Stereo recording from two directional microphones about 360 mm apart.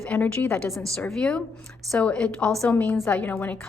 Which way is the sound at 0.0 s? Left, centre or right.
Centre.